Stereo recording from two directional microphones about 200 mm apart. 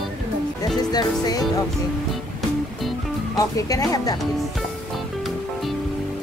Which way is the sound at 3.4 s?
15° left (ahead or behind).